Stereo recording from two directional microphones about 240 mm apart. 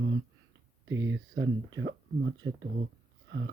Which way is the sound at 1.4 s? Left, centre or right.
Right.